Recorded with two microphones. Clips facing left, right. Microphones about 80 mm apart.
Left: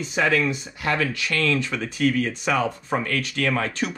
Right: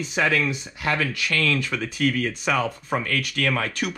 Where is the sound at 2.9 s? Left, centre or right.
Left.